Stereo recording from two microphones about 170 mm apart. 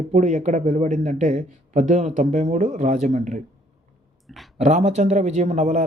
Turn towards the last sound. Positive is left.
turn(degrees=-40)  # may be behind; listen again after turning